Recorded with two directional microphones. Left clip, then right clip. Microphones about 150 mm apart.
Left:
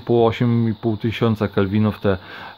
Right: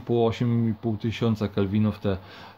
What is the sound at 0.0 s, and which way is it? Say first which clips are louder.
Speech: left 7 dB; 45° left (ahead or behind).